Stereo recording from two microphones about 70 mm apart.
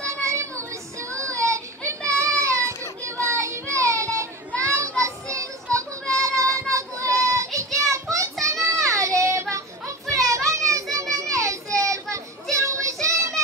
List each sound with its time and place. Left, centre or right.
0.0 s child singing: right
4.6 s children playing: right
5.0 s child singing: right
7.9 s children playing: right
8.8 s child singing: right